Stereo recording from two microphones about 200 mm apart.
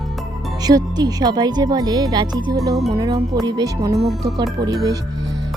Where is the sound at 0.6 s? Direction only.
20° right (ahead or behind).